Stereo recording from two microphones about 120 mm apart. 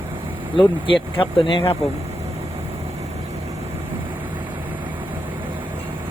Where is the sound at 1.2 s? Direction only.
45° left (ahead or behind).